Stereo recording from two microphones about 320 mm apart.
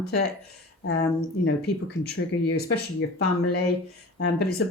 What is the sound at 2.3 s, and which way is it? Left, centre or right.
Speech, left.